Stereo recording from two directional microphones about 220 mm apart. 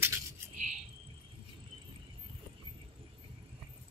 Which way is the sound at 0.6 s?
30° right (ahead or behind).